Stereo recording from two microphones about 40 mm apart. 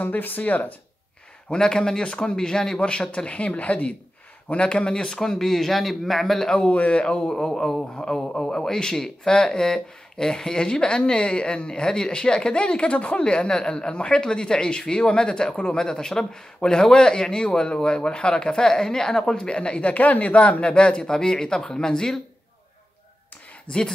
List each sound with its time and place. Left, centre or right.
0.0 s speech: left
1.5 s speech: left
2.3 s speech: centre
2.8 s speech: left
5.2 s speech: centre
6.7 s speech: left
7.2 s speech: centre; by 20.6 s left
20.6 s speech: left